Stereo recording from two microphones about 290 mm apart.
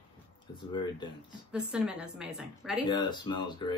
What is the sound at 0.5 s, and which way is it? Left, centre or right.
Speech, centre.